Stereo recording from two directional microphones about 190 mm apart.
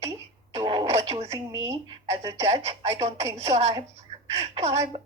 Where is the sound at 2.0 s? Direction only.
30° right (ahead or behind).